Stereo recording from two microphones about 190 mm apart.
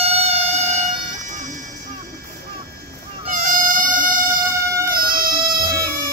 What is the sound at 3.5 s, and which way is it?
Insect, 45° right (ahead or behind).